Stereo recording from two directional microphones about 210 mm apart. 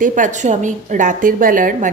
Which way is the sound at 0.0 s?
40° right (ahead or behind).